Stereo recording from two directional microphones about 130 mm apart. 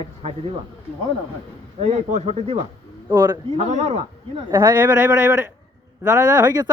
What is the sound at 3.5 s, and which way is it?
Speech, 55° right (ahead or behind).